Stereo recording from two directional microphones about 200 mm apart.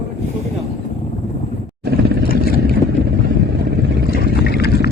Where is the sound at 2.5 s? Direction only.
50° right (ahead or behind).